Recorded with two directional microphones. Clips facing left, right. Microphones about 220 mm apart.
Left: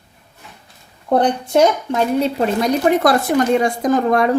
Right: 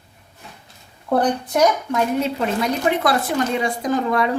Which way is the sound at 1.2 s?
30° left (ahead or behind).